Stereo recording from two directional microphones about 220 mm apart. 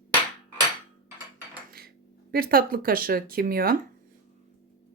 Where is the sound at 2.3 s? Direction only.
40° right (ahead or behind).